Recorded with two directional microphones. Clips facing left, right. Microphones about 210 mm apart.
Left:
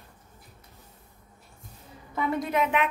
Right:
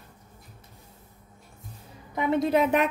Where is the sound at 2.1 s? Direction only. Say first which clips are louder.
Right 3 dB; 20° right (ahead or behind).